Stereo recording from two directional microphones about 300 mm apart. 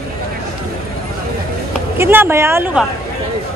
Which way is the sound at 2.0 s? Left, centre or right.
Centre.